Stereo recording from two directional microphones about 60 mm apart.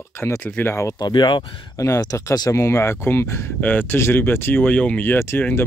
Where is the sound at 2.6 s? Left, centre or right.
Left.